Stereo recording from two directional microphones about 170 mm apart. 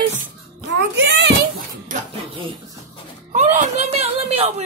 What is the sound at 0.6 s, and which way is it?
Speech, 90° right.